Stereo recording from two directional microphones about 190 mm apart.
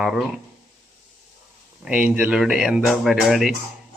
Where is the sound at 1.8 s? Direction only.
5° right (ahead or behind).